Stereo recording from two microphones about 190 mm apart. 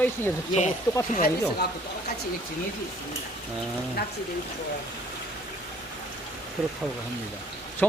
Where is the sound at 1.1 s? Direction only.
50° left (ahead or behind).